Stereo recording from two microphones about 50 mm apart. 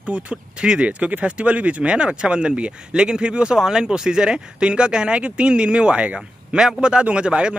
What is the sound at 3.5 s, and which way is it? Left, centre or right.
Speech, centre.